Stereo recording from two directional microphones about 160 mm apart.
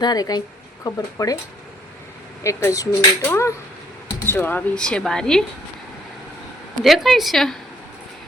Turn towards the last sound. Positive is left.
turn(degrees=0)  # may be behind; listen again after turning